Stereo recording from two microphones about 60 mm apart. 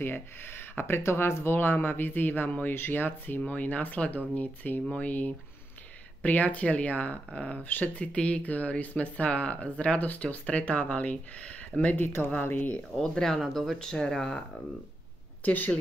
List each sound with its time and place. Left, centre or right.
0.0 s speech: left
12.9 s speech: centre
15.4 s a woman's voice: left